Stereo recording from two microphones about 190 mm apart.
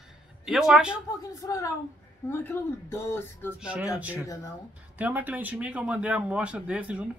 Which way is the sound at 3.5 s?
5° right (ahead or behind).